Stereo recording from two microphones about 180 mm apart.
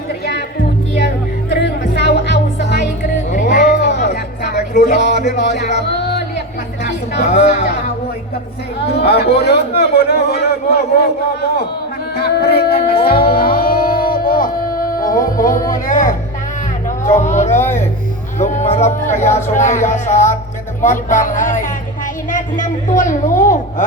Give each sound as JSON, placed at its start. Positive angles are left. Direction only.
{"t": 0.9, "sound": "music", "side_deg": 65}
{"t": 3.0, "sound": "music", "side_deg": 40}
{"t": 3.8, "sound": "music", "side_deg": 70}
{"t": 4.7, "sound": "speech", "side_deg": 40}
{"t": 6.8, "sound": "chatter", "side_deg": 65}
{"t": 7.3, "sound": "speech", "side_deg": 35}
{"t": 9.0, "sound": "a man's voice", "side_deg": 65}
{"t": 12.1, "sound": "music", "side_deg": 60}
{"t": 15.4, "sound": "speech", "side_deg": 15}
{"t": 15.9, "sound": "speech", "side_deg": 45}
{"t": 18.3, "sound": "music", "side_deg": 40}
{"t": 19.5, "sound": "speech", "side_deg": 45}